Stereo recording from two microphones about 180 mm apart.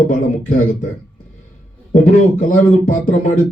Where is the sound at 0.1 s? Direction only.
50° left (ahead or behind).